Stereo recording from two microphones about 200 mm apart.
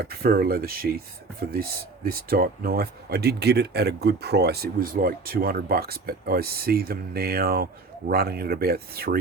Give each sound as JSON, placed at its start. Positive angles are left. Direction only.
{"t": 0.0, "sound": "speech", "side_deg": -50}